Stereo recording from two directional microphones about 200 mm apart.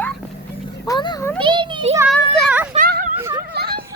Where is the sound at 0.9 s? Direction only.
20° left (ahead or behind).